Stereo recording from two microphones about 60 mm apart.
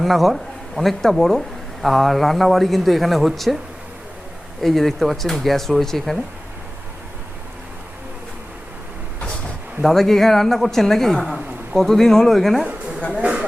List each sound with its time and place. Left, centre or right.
0.0 s speech: centre
4.6 s speech: centre
9.8 s speech: centre
13.0 s speech: centre